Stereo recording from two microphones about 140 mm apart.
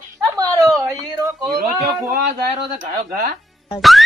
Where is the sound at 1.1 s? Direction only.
25° right (ahead or behind).